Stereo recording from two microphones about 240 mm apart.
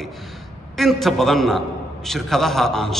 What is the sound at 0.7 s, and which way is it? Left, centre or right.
A man's voice, centre.